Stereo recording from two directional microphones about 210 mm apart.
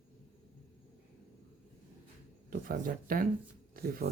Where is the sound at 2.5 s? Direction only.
40° right (ahead or behind).